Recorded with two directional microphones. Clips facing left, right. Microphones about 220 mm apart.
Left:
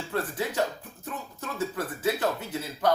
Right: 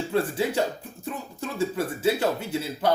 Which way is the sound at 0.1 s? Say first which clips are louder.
Right 5 dB; 30° right (ahead or behind).